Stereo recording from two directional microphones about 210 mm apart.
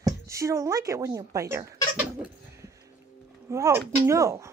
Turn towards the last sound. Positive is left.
turn(degrees=-15)  # may be behind; listen again after turning